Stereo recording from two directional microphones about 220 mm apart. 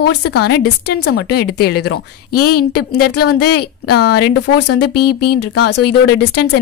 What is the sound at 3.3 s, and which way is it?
A woman's voice, 45° left (ahead or behind).